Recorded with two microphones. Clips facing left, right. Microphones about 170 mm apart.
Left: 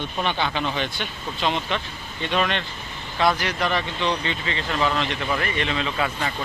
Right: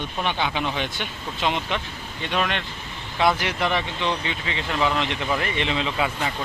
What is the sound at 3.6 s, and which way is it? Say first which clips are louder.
Speech: even; 15° right (ahead or behind).